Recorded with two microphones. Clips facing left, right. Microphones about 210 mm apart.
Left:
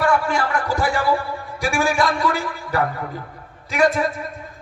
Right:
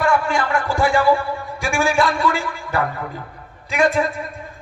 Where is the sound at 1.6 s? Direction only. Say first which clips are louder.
Right 1 dB; 40° left (ahead or behind).